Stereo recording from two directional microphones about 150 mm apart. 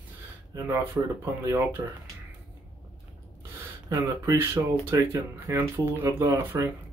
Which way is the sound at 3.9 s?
15° right (ahead or behind).